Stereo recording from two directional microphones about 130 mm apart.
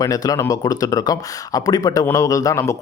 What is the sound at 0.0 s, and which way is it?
Speech, 25° left (ahead or behind).